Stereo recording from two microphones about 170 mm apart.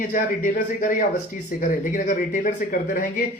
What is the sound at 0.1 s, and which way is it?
Speech, 55° left (ahead or behind).